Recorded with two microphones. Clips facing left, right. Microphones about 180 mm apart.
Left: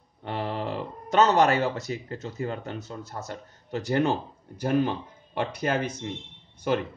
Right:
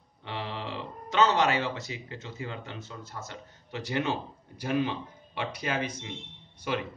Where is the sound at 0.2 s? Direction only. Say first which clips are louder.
Left 6 dB; 45° left (ahead or behind).